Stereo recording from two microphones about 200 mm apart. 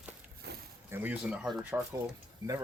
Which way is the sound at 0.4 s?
55° right (ahead or behind).